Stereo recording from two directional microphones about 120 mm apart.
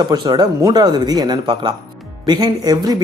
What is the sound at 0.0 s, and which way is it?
Speech, 35° right (ahead or behind).